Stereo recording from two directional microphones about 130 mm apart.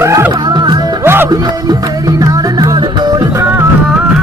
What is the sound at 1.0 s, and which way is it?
Music, 15° right (ahead or behind).